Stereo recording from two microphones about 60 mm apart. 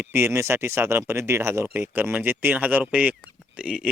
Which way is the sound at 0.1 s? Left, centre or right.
Right.